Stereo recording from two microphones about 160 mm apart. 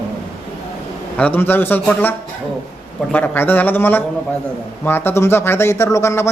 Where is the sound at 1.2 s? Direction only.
10° left (ahead or behind).